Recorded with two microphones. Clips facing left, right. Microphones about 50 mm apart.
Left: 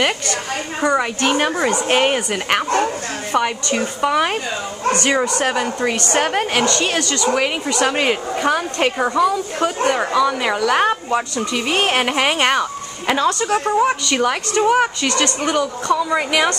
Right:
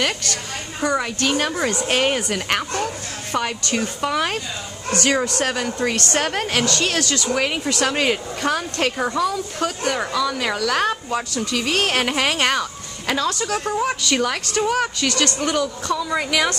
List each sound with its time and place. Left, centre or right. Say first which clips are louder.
0.0 s a woman's voice: left 4 dB; left
9.6 s a woman's voice: left 5 dB; left